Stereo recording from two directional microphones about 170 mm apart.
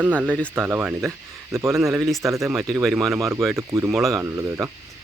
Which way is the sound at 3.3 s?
15° right (ahead or behind).